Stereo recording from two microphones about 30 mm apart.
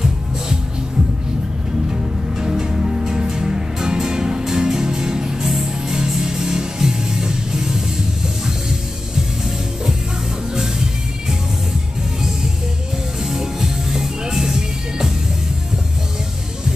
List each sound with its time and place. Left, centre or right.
1.9 s music: centre
10.5 s music: centre
13.2 s music: centre